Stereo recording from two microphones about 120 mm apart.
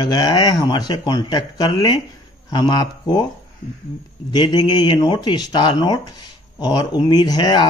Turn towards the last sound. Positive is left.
turn(degrees=40)  # may be behind; listen again after turning